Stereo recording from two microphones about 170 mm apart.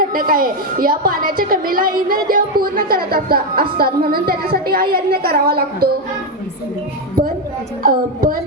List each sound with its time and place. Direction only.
0.0 s a woman's voice: 60° right (ahead or behind)
7.9 s a woman's voice: 55° right (ahead or behind)